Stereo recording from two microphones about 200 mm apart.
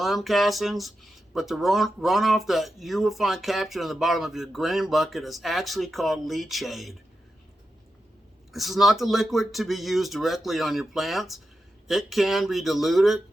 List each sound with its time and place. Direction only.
0.0 s speech: centre (ahead or behind)
8.5 s speech: centre (ahead or behind)